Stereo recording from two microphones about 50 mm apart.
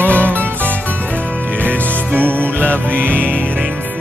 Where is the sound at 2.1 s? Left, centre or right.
Right.